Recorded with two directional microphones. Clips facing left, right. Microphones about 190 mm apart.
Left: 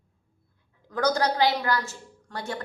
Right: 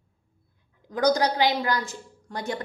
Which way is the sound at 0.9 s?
15° right (ahead or behind).